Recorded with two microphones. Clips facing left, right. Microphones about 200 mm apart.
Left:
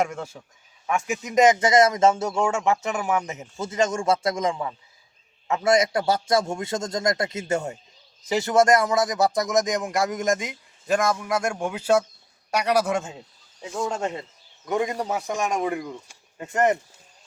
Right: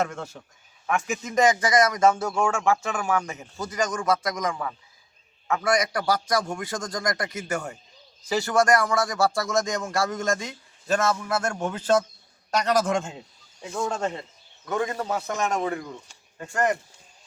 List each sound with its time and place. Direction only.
0.0 s speech: 10° left (ahead or behind)